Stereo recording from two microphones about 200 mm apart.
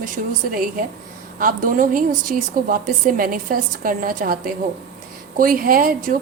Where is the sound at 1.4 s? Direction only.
45° right (ahead or behind).